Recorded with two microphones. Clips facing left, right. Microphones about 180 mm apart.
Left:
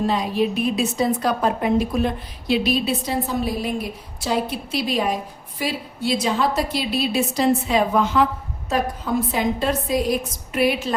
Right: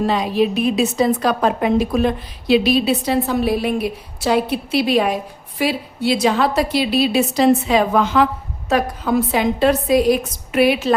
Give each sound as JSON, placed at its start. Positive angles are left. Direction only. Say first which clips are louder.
{"t": 0.0, "sound": "a woman's voice", "louder": "right 3 dB", "side_deg": -80}
{"t": 8.7, "sound": "a woman's voice", "louder": "right 4 dB", "side_deg": -75}